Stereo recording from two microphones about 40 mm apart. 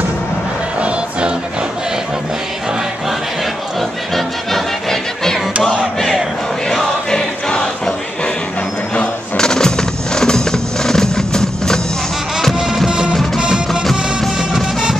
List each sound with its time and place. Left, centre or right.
0.7 s music: right
4.1 s music: centre
5.9 s battle cry: centre
6.7 s choir: centre
9.4 s music: centre